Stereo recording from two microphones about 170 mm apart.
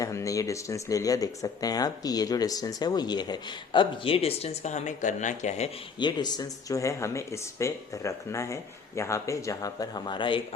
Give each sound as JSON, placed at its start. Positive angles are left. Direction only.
{"t": 0.0, "sound": "speech", "side_deg": 20}
{"t": 6.0, "sound": "speech", "side_deg": 25}